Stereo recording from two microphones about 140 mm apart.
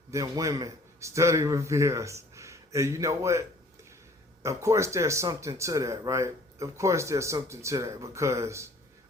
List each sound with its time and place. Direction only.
0.1 s a man's voice: 20° right (ahead or behind)
4.4 s speech: 20° right (ahead or behind)